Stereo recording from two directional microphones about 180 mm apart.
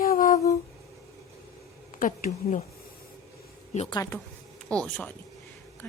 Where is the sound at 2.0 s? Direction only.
45° left (ahead or behind).